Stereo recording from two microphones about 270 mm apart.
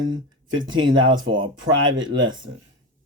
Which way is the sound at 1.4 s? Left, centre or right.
Right.